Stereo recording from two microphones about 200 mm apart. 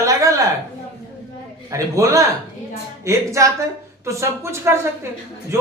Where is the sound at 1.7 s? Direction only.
15° right (ahead or behind).